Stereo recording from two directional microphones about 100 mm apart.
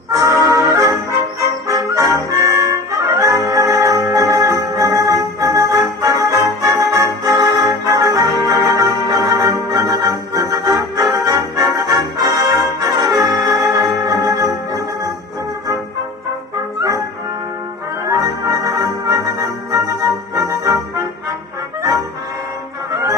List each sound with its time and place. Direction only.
0.1 s brass instrument: 30° right (ahead or behind)
1.7 s music: 35° right (ahead or behind)
2.7 s brass instrument: 35° right (ahead or behind)
3.7 s music: 35° right (ahead or behind)
12.5 s brass instrument: 35° right (ahead or behind)
13.7 s music: 35° right (ahead or behind)
18.1 s music: 35° right (ahead or behind)